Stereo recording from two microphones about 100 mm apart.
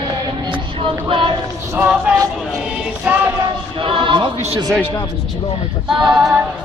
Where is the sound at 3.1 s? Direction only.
15° right (ahead or behind).